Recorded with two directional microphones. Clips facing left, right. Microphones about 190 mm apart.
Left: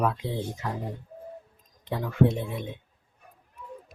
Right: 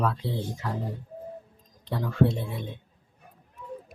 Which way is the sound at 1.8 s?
15° left (ahead or behind).